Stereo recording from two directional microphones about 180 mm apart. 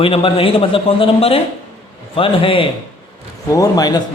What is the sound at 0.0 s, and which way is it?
Speech, 30° left (ahead or behind).